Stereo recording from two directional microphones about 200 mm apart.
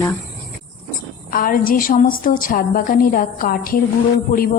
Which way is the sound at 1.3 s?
45° left (ahead or behind).